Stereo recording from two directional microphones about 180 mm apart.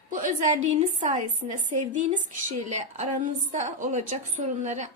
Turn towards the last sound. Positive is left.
turn(degrees=-40)  # may be behind; listen again after turning